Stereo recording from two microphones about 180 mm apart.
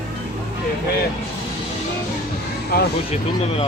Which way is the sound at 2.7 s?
55° left (ahead or behind).